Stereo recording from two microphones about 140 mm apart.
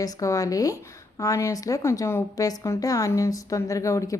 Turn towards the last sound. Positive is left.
turn(degrees=20)  # may be behind; listen again after turning